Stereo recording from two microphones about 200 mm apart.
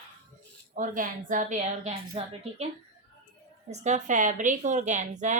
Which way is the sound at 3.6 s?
35° right (ahead or behind).